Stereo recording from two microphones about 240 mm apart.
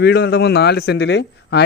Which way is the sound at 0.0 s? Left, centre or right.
Left.